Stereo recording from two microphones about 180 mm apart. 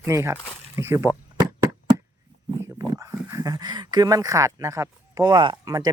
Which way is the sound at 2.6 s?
15° right (ahead or behind).